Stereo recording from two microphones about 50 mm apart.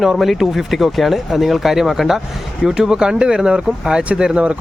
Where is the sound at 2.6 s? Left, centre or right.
Centre.